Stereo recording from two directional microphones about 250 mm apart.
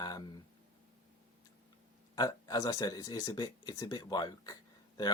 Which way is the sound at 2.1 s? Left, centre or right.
Centre.